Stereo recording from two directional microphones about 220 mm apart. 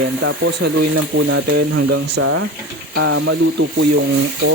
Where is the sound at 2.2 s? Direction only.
75° right (ahead or behind).